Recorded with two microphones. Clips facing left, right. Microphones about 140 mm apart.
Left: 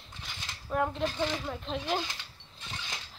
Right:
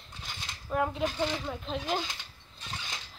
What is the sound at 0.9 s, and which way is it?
Speech, 10° right (ahead or behind).